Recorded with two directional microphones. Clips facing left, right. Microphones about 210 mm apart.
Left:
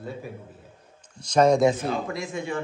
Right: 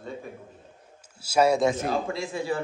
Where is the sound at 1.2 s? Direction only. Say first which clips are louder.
Left 3 dB; 5° right (ahead or behind).